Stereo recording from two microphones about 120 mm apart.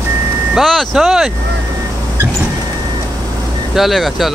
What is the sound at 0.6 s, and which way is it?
Speech, centre (ahead or behind).